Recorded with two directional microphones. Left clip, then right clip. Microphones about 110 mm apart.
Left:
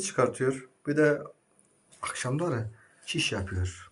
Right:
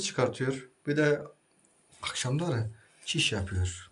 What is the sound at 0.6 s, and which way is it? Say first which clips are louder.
Speech: left 2 dB; centre (ahead or behind).